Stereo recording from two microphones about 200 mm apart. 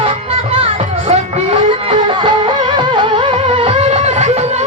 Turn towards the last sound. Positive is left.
turn(degrees=-35)  # may be behind; listen again after turning